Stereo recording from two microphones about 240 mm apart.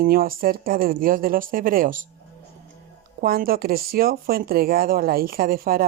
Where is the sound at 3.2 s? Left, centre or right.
Right.